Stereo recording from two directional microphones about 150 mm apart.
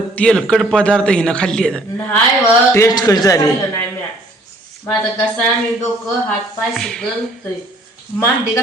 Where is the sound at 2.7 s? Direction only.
20° left (ahead or behind).